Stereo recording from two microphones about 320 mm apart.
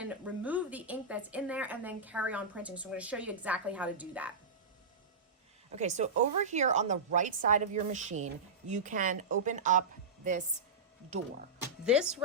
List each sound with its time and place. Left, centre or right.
0.0 s a woman's voice: centre
5.7 s a woman's voice: right
11.9 s a woman's voice: centre